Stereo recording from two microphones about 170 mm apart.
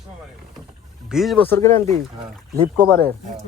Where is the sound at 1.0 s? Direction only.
Centre (ahead or behind).